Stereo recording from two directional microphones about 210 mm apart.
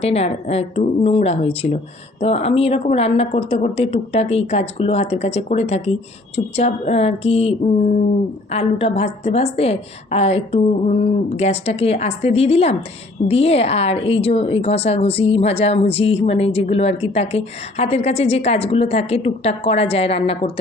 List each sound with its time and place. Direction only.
0.0 s a woman's voice: 30° left (ahead or behind)
8.5 s a woman's voice: 30° left (ahead or behind)